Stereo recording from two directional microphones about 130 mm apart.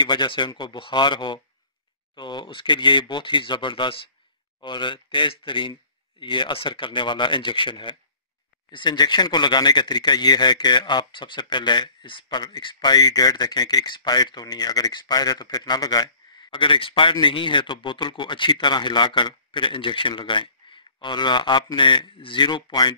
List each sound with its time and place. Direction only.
0.0 s speech: 35° left (ahead or behind)